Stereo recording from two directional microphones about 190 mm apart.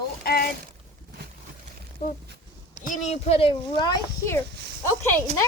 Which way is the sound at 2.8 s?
40° left (ahead or behind).